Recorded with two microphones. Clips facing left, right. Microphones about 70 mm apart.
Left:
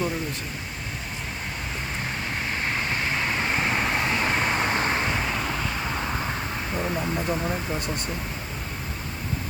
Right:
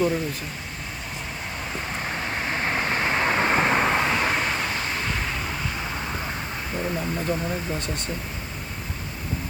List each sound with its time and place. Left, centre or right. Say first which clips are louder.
2.3 s vehicle: right 3 dB; right
4.1 s vehicle: right 1 dB; centre
4.7 s vehicle: left 4 dB; left
6.7 s speech: even; centre